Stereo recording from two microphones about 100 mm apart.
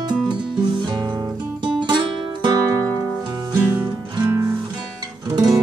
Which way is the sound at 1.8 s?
50° right (ahead or behind).